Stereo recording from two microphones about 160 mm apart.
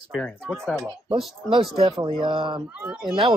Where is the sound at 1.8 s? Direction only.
30° right (ahead or behind).